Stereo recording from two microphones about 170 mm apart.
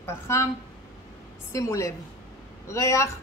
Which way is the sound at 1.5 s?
20° left (ahead or behind).